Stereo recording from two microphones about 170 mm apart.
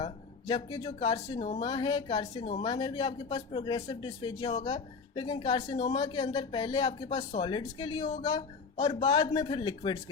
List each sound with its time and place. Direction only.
0.4 s speech: 25° left (ahead or behind)
0.9 s a man's voice: 35° left (ahead or behind)
9.0 s speech: 25° left (ahead or behind)